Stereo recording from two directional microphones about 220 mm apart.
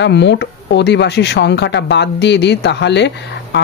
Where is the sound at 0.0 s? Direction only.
50° left (ahead or behind).